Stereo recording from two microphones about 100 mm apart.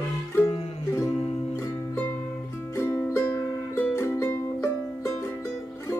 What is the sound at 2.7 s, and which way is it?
Music, 25° left (ahead or behind).